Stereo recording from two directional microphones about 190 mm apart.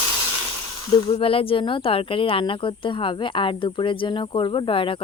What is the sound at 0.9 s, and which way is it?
Speech, 30° left (ahead or behind).